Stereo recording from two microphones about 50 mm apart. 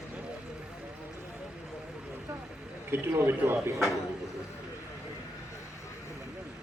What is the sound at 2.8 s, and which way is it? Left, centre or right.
Speech, right.